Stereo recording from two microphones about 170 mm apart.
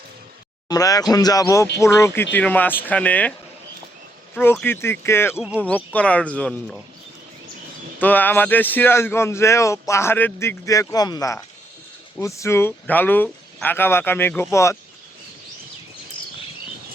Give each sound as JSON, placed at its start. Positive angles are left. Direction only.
{"t": 0.7, "sound": "a man's voice", "side_deg": 20}
{"t": 4.6, "sound": "a man's voice", "side_deg": 15}
{"t": 7.9, "sound": "a man's voice", "side_deg": 10}